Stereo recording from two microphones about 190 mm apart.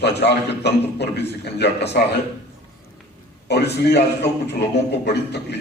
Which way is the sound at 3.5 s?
60° left (ahead or behind).